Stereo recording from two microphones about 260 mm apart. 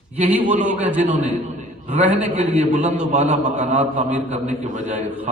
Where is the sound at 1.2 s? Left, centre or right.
Right.